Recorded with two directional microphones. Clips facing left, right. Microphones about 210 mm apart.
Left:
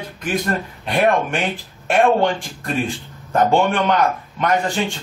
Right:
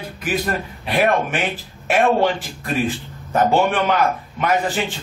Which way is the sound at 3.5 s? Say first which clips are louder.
Left 1 dB; 5° right (ahead or behind).